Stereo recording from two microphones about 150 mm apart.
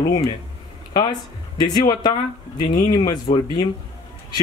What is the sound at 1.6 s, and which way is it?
Speech, 30° left (ahead or behind).